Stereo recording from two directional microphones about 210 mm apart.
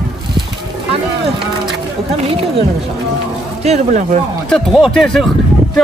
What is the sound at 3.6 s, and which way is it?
Speech, 35° right (ahead or behind).